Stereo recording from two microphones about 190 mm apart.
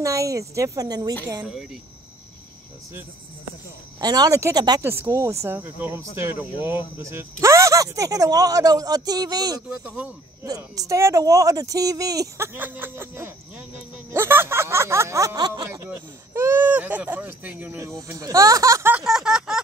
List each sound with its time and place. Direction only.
0.0 s speech: 15° right (ahead or behind)
4.0 s speech: 20° right (ahead or behind)
9.7 s speech: 5° right (ahead or behind)
10.4 s speech: 20° right (ahead or behind); by 19.6 s 5° right (ahead or behind)